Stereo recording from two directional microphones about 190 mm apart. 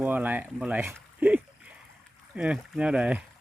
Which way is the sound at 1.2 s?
5° right (ahead or behind).